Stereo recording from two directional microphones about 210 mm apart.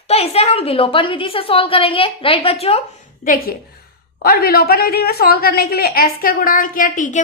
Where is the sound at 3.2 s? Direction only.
40° left (ahead or behind).